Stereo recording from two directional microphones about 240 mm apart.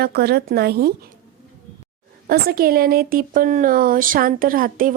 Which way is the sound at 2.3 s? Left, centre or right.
Right.